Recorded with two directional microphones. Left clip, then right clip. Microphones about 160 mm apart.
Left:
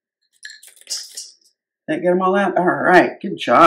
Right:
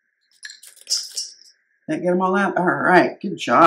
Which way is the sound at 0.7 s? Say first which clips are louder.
Right 5 dB; centre (ahead or behind).